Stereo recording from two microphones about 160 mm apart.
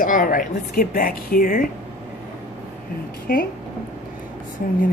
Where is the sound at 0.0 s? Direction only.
60° left (ahead or behind).